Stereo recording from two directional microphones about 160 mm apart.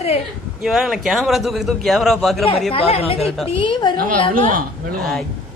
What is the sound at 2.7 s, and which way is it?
Speech, 40° left (ahead or behind).